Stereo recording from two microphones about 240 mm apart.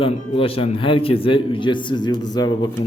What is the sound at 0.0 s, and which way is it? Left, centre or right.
A man's voice, left.